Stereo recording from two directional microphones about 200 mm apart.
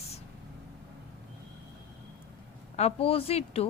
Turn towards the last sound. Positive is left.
turn(degrees=30)  # may be behind; listen again after turning